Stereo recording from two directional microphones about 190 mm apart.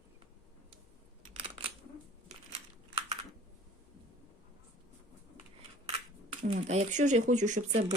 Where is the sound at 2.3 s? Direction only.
35° right (ahead or behind).